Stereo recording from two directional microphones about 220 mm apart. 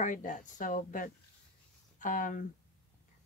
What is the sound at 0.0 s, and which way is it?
Speech, 35° left (ahead or behind).